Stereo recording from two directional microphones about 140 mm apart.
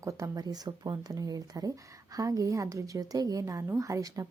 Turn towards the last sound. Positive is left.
turn(degrees=-25)  # may be behind; listen again after turning